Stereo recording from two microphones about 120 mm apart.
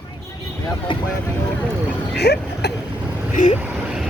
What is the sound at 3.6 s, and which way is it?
Vehicle, 15° right (ahead or behind).